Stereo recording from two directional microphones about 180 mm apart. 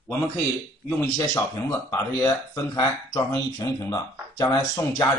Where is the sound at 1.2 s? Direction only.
15° left (ahead or behind).